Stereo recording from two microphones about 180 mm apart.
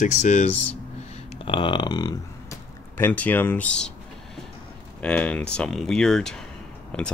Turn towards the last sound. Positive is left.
turn(degrees=5)  # may be behind; listen again after turning